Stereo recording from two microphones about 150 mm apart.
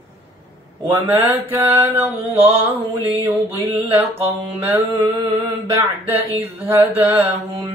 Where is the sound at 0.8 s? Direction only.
15° right (ahead or behind).